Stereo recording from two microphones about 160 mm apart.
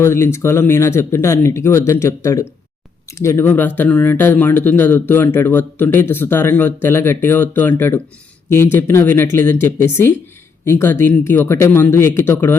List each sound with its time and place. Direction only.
0.0 s speech: 15° left (ahead or behind)